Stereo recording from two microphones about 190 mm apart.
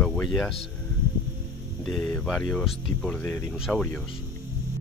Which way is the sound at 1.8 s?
Centre (ahead or behind).